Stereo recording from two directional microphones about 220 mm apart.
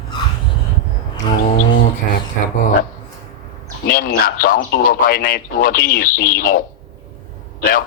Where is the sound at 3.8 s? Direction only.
40° left (ahead or behind).